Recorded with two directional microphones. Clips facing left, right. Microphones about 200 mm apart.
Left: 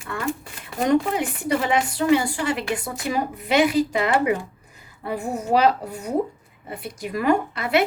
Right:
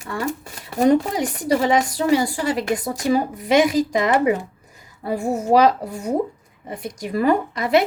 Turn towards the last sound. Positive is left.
turn(degrees=-40)  # may be behind; listen again after turning